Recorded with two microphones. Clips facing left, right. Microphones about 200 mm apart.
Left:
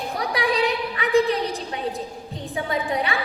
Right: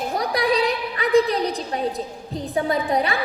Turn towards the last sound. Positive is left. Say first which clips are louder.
# right 3 dB
turn(degrees=-40)  # may be behind; listen again after turning